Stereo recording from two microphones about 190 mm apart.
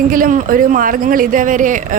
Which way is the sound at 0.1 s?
45° right (ahead or behind).